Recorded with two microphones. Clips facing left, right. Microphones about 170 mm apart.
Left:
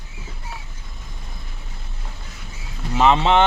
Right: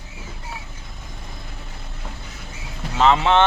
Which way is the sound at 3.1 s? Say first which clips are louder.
Left 1 dB; 25° left (ahead or behind).